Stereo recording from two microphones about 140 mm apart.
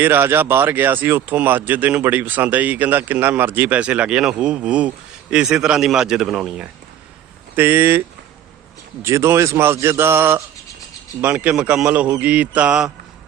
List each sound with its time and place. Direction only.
0.0 s a man's voice: 15° right (ahead or behind)